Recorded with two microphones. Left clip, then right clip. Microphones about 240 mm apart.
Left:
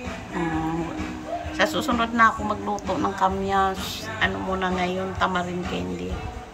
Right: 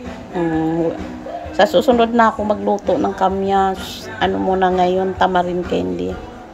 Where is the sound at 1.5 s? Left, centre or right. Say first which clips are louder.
Right 11 dB; centre.